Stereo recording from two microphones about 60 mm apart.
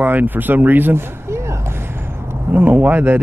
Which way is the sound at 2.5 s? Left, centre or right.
Right.